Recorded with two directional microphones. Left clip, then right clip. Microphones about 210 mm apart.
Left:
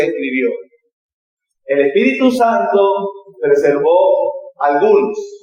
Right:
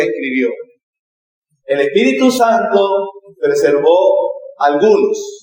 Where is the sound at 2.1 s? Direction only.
35° right (ahead or behind).